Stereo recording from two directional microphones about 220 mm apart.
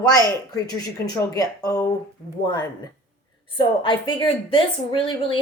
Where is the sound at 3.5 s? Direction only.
20° left (ahead or behind).